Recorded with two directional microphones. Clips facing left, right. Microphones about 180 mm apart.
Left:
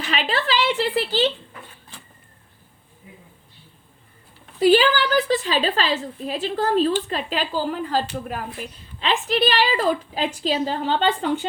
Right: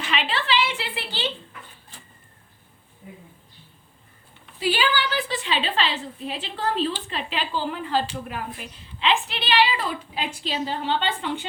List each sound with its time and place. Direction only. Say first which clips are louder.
0.1 s a woman's voice: left 2 dB; 40° left (ahead or behind)
4.6 s a woman's voice: left 8 dB; 45° left (ahead or behind)